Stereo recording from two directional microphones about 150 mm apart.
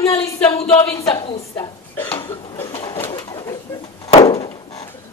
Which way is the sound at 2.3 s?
35° left (ahead or behind).